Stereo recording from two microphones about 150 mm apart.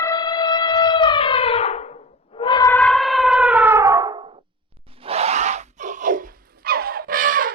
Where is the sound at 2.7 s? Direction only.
5° left (ahead or behind); by 7.5 s 70° right (ahead or behind).